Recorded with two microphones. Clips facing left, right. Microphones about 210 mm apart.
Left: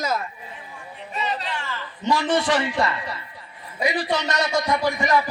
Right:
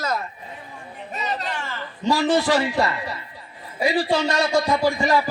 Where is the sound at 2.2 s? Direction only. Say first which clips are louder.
Right 5 dB; 25° right (ahead or behind).